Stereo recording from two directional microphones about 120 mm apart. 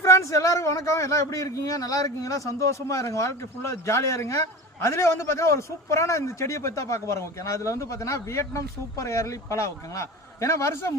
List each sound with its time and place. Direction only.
0.0 s a man's voice: 25° left (ahead or behind)